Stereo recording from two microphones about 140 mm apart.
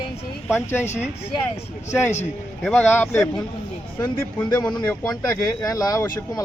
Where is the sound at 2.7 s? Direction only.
15° left (ahead or behind).